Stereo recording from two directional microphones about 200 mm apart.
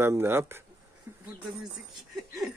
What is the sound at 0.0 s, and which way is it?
Speech, 10° right (ahead or behind).